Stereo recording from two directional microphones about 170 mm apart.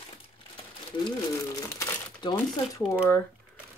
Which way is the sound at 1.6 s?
20° left (ahead or behind).